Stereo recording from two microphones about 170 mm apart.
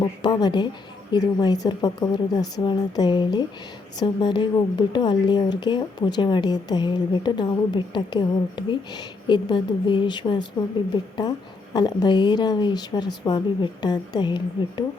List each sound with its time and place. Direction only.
0.0 s a woman's voice: 25° left (ahead or behind)